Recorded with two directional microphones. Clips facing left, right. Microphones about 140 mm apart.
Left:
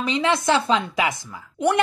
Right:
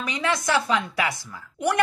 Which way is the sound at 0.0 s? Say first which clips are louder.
Left 5 dB; 25° left (ahead or behind).